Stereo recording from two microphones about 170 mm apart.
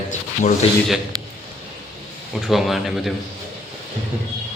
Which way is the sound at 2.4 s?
Centre (ahead or behind).